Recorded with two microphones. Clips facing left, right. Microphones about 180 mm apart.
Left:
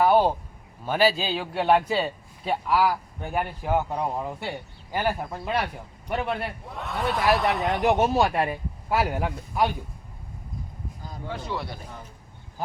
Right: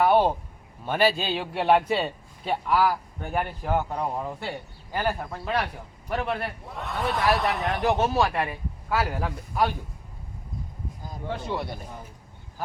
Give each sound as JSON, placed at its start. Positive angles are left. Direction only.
{"t": 0.0, "sound": "a man's voice", "side_deg": 0}
{"t": 7.6, "sound": "speech", "side_deg": 20}
{"t": 11.4, "sound": "speech", "side_deg": -20}